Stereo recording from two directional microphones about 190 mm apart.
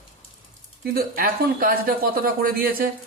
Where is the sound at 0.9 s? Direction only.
50° right (ahead or behind).